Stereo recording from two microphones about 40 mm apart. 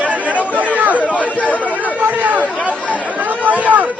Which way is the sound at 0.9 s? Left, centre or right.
Left.